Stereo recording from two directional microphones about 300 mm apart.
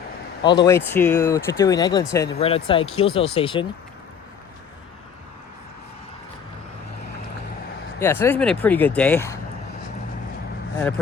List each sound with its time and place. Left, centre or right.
0.4 s speech: centre
7.9 s speech: centre
10.8 s speech: centre